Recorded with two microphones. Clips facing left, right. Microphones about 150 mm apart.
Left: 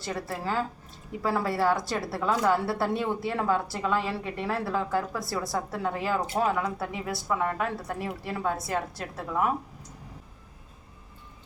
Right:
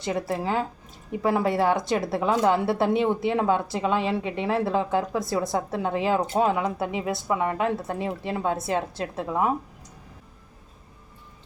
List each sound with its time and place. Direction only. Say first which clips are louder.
0.0 s speech: right 6 dB; 20° right (ahead or behind)